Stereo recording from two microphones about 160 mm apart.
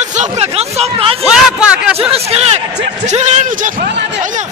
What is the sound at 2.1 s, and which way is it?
A man's voice, 40° right (ahead or behind).